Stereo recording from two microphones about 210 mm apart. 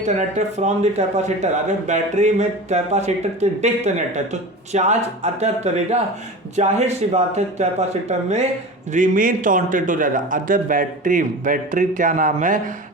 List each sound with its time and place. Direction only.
0.0 s speech: 35° right (ahead or behind)